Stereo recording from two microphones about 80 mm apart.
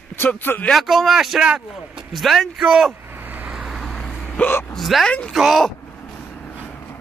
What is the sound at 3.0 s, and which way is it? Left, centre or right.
Vehicle, right.